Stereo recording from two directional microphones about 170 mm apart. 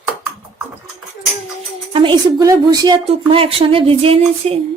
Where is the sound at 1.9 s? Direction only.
30° right (ahead or behind).